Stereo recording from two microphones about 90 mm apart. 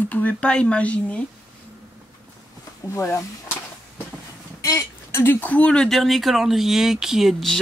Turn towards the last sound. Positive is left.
turn(degrees=0)  # may be behind; listen again after turning